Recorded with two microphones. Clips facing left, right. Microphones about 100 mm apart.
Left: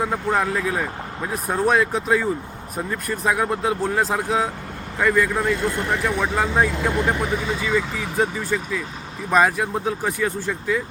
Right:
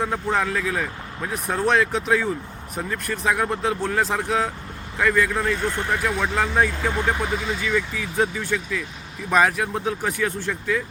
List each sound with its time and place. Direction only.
0.0 s speech: 5° left (ahead or behind)